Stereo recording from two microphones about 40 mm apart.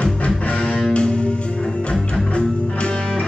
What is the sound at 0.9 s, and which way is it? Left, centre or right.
Music, left.